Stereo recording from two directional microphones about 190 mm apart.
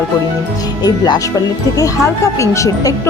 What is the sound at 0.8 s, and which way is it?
Speech, 20° left (ahead or behind).